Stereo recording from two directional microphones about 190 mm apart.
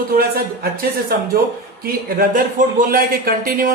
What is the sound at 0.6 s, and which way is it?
Speech, 50° right (ahead or behind).